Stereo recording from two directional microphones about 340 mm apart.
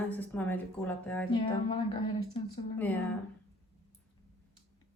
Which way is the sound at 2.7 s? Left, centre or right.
Centre.